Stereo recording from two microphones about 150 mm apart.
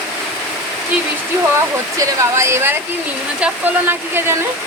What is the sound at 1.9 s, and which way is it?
Speech, 20° right (ahead or behind).